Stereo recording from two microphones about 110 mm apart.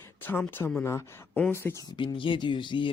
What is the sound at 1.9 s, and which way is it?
Speech, 45° left (ahead or behind).